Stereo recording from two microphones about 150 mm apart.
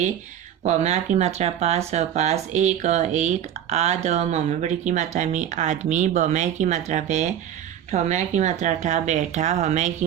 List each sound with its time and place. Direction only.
0.6 s speech: 50° right (ahead or behind)